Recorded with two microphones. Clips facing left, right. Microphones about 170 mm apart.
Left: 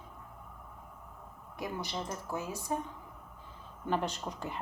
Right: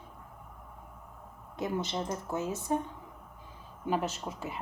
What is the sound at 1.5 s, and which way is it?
A woman's voice, 20° right (ahead or behind).